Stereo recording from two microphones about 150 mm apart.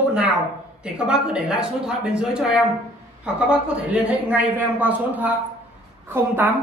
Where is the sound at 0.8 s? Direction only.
5° right (ahead or behind).